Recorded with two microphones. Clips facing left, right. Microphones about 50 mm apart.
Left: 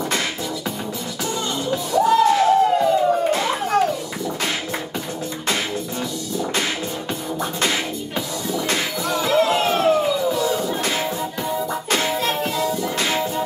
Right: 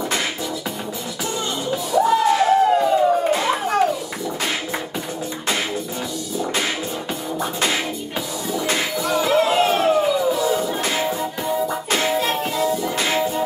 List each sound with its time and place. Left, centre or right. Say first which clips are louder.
1.7 s music: even; centre
7.3 s music: right 1 dB; centre